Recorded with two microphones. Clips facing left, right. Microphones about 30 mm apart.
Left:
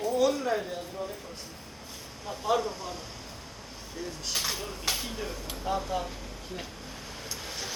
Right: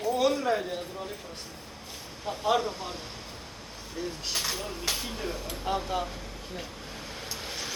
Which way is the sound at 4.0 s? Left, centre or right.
Right.